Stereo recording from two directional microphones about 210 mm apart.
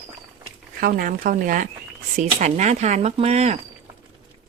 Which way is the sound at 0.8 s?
45° right (ahead or behind).